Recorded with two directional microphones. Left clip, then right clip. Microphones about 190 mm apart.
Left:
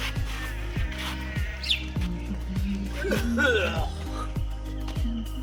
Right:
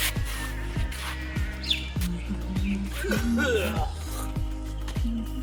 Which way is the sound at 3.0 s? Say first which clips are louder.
Left 1 dB; 35° left (ahead or behind).